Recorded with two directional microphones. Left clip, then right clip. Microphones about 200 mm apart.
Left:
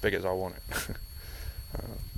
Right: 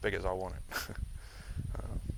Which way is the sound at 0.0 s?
55° left (ahead or behind).